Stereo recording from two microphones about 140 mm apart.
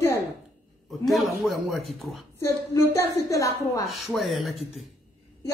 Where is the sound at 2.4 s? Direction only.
20° left (ahead or behind).